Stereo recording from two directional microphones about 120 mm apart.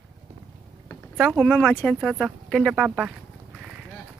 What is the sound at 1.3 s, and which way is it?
Speech, 5° left (ahead or behind).